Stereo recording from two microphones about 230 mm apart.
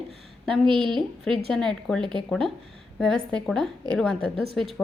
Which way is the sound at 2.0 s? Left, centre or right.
Right.